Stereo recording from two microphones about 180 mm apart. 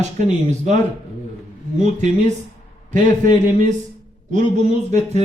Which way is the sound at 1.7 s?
40° right (ahead or behind).